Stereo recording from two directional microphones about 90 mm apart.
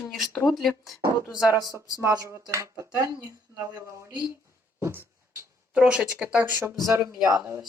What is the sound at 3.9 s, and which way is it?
Speech, 35° right (ahead or behind).